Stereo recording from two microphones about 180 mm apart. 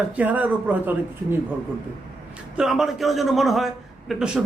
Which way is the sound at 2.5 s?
Centre (ahead or behind).